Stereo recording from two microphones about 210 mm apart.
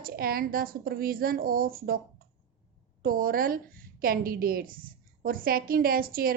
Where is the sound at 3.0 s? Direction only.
45° right (ahead or behind).